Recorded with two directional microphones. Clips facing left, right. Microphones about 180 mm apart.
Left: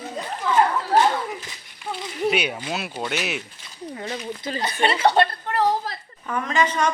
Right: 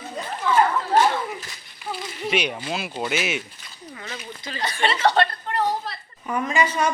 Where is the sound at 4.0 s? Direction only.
40° left (ahead or behind).